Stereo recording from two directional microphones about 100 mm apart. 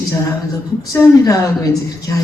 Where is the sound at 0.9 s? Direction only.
35° left (ahead or behind).